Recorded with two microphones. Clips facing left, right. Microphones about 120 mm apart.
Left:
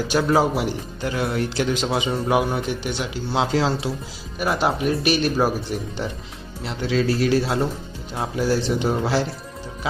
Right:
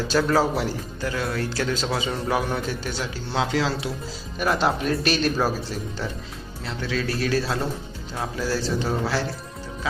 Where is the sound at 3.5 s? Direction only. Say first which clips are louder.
Left 3 dB; 30° left (ahead or behind).